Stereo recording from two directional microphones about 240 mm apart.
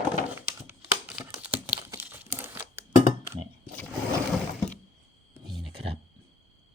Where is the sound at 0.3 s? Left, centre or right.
Centre.